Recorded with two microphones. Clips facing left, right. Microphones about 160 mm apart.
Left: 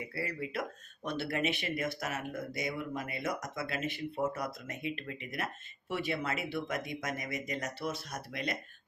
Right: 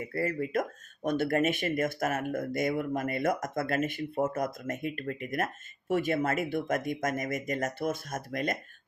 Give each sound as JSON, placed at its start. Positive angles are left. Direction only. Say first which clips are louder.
{"t": 0.0, "sound": "speech", "louder": "right 7 dB", "side_deg": -45}